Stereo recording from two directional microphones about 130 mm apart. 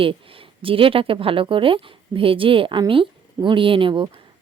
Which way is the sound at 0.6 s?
45° right (ahead or behind).